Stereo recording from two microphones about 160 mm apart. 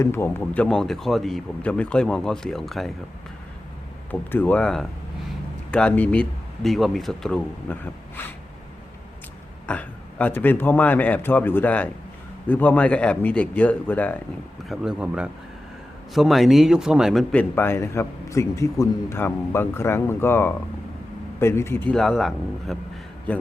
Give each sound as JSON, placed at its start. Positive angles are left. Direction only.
{"t": 0.0, "sound": "speech", "side_deg": 15}
{"t": 4.1, "sound": "a man's voice", "side_deg": 10}
{"t": 9.6, "sound": "a man's voice", "side_deg": 10}
{"t": 14.7, "sound": "speech", "side_deg": -5}
{"t": 17.3, "sound": "a man's voice", "side_deg": 10}